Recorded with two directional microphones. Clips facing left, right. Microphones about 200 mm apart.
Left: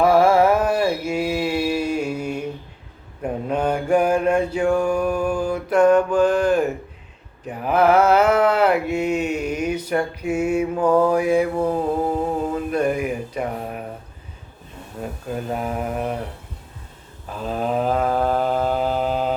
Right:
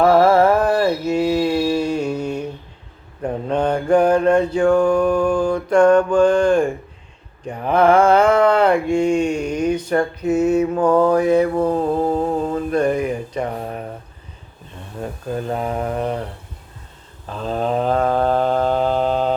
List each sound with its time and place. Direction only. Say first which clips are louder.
0.0 s mantra: right 2 dB; 10° left (ahead or behind)
3.5 s mantra: right 3 dB; 5° left (ahead or behind)
7.4 s a sound: right 2 dB; 5° left (ahead or behind)
12.4 s mantra: right 3 dB; 10° left (ahead or behind)
15.6 s a sound: right 3 dB; 5° left (ahead or behind)
17.3 s mantra: right 2 dB; 5° left (ahead or behind)